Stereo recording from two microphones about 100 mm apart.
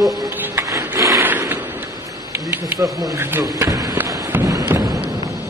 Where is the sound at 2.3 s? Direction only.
25° right (ahead or behind).